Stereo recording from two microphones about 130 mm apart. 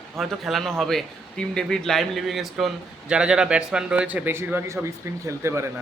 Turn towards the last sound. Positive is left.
turn(degrees=-20)  # may be behind; listen again after turning